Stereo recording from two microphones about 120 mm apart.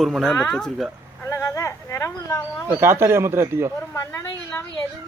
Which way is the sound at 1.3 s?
25° left (ahead or behind).